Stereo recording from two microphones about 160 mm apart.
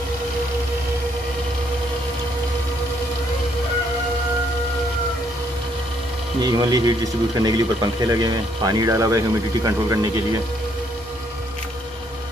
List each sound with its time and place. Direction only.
6.4 s speech: 25° right (ahead or behind)